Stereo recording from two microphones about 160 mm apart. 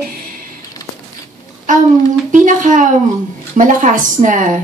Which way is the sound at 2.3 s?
55° right (ahead or behind).